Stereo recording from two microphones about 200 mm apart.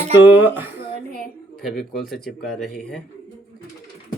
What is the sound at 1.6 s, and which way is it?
Speech, centre (ahead or behind).